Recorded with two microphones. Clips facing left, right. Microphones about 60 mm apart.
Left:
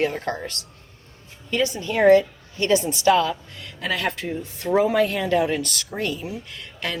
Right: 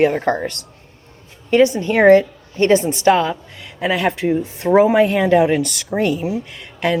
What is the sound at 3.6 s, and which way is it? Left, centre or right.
Speech, right.